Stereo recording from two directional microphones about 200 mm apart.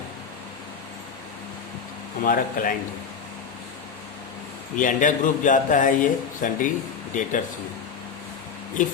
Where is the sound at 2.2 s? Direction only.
45° left (ahead or behind).